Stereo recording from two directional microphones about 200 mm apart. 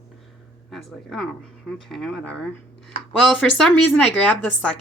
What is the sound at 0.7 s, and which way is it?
Speech, centre (ahead or behind).